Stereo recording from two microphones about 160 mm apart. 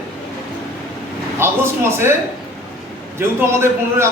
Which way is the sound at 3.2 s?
15° right (ahead or behind).